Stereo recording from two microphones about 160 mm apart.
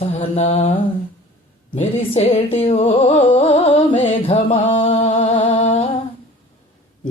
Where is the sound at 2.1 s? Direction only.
35° left (ahead or behind).